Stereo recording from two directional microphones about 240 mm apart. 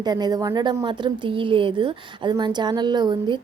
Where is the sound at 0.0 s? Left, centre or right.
Centre.